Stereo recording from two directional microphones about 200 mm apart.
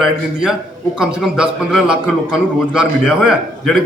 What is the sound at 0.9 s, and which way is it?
A man's voice, centre (ahead or behind).